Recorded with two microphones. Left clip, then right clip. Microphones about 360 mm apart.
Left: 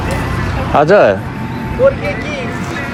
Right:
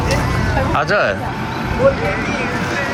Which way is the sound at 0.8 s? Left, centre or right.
Centre.